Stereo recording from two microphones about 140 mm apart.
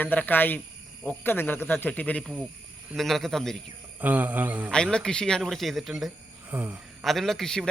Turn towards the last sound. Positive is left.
turn(degrees=5)  # may be behind; listen again after turning